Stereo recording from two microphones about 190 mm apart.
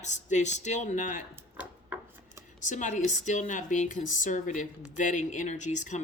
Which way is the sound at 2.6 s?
40° left (ahead or behind).